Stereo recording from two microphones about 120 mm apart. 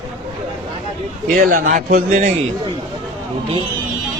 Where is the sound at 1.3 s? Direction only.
90° right.